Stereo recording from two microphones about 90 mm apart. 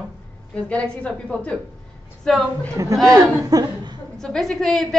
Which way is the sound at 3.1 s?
45° right (ahead or behind).